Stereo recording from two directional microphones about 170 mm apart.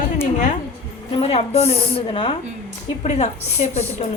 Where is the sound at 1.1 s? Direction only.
35° left (ahead or behind).